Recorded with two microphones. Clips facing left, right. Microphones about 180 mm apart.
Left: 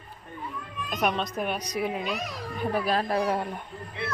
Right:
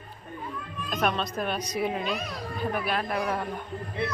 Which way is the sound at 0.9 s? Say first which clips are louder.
Even; 15° left (ahead or behind).